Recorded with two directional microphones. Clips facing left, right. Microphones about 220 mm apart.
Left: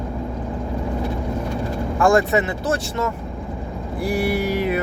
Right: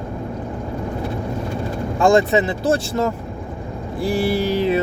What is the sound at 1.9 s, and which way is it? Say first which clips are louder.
Speech: right 2 dB; 25° right (ahead or behind).